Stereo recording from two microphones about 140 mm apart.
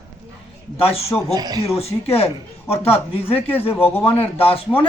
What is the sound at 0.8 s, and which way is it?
Speech, 45° left (ahead or behind).